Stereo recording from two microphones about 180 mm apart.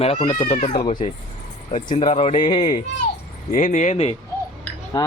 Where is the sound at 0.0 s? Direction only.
35° left (ahead or behind).